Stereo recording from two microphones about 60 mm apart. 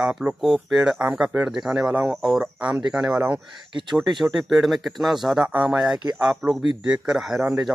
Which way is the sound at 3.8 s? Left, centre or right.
Centre.